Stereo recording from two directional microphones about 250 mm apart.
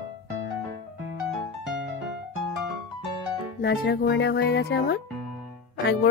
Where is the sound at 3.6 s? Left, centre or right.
Left.